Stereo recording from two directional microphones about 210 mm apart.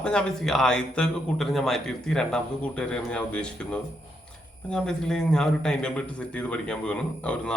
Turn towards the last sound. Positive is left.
turn(degrees=5)  # may be behind; listen again after turning